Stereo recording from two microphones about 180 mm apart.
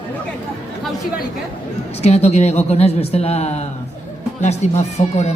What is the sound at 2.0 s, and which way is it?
A man's voice, 35° left (ahead or behind).